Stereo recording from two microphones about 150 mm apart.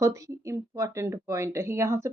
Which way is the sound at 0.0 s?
20° right (ahead or behind).